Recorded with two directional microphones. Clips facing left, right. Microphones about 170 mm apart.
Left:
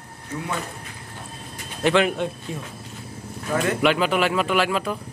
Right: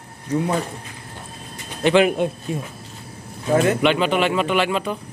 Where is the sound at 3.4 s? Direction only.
30° right (ahead or behind).